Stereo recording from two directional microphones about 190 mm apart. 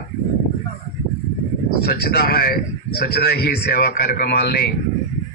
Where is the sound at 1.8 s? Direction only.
55° left (ahead or behind).